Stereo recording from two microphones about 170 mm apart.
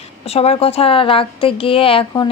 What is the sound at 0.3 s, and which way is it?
Speech, 35° left (ahead or behind).